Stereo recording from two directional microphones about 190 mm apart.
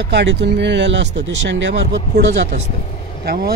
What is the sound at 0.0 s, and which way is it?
Speech, 65° right (ahead or behind).